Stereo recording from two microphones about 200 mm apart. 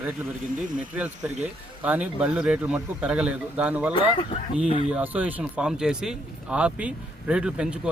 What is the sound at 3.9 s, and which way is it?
Speech, 25° left (ahead or behind).